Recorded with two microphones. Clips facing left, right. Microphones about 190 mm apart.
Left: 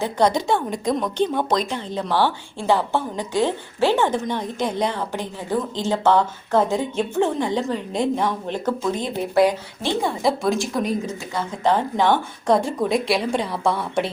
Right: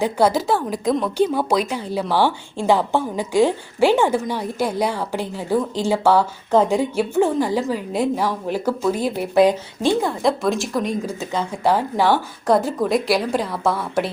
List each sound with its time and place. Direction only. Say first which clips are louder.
0.0 s a woman's voice: right 2 dB; 5° right (ahead or behind)
9.3 s a woman's voice: right 2 dB; 20° right (ahead or behind)
10.0 s a woman's voice: right 1 dB; centre (ahead or behind)
11.2 s a woman's voice: right 3 dB; 20° right (ahead or behind)
11.6 s a woman's voice: right 1 dB; 10° right (ahead or behind)